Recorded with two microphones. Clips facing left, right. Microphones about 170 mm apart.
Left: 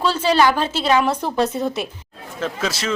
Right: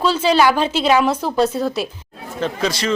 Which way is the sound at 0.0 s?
10° right (ahead or behind).